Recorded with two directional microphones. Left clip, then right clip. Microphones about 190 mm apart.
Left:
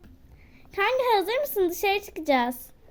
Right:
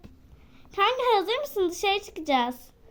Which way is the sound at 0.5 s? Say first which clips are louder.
Even; 20° left (ahead or behind).